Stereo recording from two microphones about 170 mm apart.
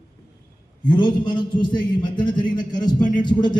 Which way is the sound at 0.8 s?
25° left (ahead or behind).